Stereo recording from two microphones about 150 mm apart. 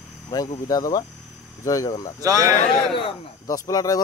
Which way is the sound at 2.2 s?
25° right (ahead or behind).